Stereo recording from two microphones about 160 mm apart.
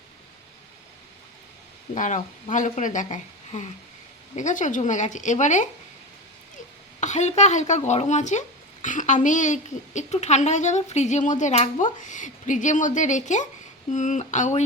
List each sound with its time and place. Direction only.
2.0 s speech: 50° left (ahead or behind)
7.0 s speech: 45° left (ahead or behind)